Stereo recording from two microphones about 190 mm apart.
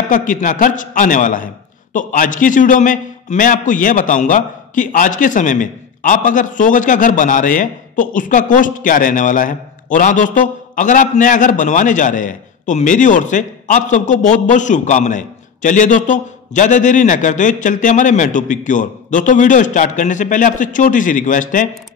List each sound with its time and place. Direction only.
0.1 s a man's voice: 40° left (ahead or behind)